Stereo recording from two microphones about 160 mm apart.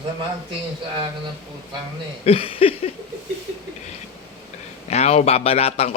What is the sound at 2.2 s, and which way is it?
Speech, 35° left (ahead or behind).